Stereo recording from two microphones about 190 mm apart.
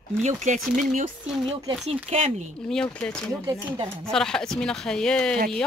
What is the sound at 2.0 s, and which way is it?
Speech, 35° right (ahead or behind).